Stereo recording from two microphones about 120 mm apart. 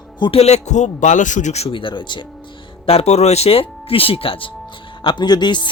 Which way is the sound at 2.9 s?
60° left (ahead or behind).